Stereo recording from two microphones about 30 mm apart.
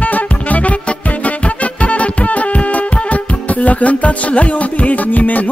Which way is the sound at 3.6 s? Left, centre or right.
Left.